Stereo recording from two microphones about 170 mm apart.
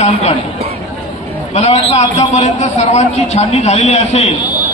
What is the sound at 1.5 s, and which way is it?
A man's voice, 40° left (ahead or behind).